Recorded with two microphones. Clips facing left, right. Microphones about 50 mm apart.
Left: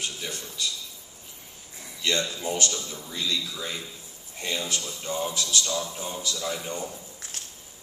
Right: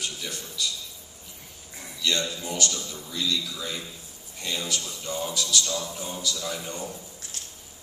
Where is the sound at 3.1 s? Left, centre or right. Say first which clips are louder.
Right 1 dB; left.